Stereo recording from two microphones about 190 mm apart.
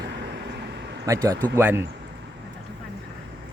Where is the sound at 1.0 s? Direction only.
15° right (ahead or behind).